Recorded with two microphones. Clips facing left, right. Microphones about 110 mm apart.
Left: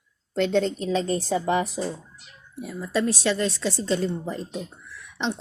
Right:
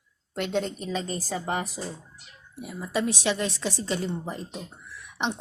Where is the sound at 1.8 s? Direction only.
90° left.